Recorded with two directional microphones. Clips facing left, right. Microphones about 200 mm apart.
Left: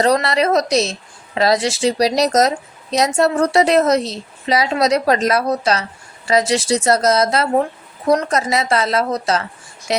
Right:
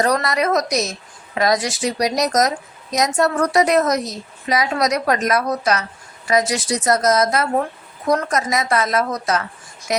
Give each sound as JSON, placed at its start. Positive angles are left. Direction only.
{"t": 0.0, "sound": "a woman's voice", "side_deg": 25}